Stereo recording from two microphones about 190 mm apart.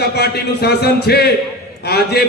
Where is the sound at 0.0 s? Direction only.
60° left (ahead or behind).